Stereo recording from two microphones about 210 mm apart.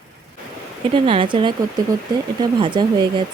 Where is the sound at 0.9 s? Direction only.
25° right (ahead or behind).